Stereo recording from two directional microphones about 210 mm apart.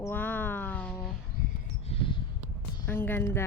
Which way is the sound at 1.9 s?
30° left (ahead or behind).